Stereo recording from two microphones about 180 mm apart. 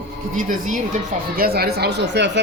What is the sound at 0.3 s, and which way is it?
Speech, 45° right (ahead or behind).